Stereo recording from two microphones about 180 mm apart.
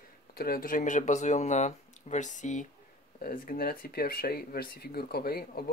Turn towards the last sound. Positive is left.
turn(degrees=55)  # may be behind; listen again after turning